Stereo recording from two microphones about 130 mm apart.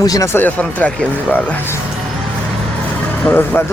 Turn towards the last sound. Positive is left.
turn(degrees=15)  # may be behind; listen again after turning